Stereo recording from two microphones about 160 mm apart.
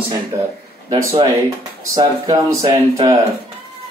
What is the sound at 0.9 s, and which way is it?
Speech, 30° right (ahead or behind).